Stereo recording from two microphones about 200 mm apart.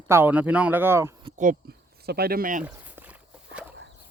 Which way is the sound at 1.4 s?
45° right (ahead or behind).